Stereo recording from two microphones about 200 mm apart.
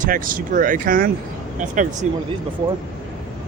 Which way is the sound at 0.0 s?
45° right (ahead or behind).